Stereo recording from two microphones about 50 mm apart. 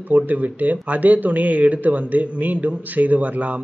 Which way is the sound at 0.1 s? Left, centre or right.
Right.